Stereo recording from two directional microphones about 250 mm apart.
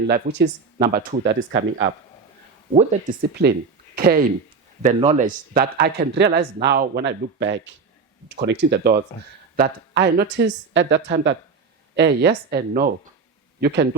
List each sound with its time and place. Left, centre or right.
0.1 s a man's voice: right
3.9 s a sound: right
4.8 s a man's voice: right